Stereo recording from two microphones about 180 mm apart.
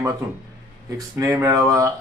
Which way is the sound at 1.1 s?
15° right (ahead or behind).